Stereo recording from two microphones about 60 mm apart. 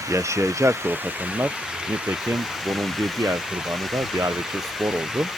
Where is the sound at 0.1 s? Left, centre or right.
Right.